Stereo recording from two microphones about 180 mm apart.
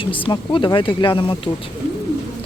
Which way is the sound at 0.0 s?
30° left (ahead or behind).